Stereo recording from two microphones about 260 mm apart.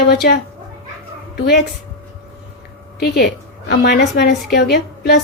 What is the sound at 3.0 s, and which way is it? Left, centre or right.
A woman's voice, left.